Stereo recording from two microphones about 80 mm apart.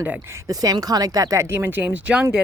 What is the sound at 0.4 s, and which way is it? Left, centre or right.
Speech, right.